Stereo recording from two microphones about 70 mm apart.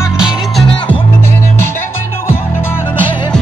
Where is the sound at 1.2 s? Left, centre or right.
Left.